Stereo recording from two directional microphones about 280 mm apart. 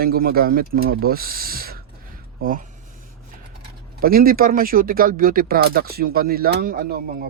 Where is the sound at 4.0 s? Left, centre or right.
Right.